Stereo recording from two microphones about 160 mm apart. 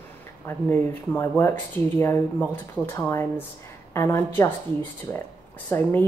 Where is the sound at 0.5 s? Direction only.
15° left (ahead or behind).